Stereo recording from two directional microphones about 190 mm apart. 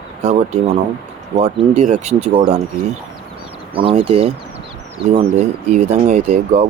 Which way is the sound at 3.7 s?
25° right (ahead or behind).